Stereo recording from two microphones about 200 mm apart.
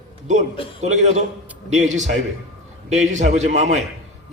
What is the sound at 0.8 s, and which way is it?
A man's voice, 35° right (ahead or behind).